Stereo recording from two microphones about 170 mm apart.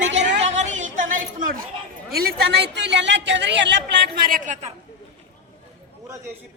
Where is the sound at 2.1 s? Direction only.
65° right (ahead or behind).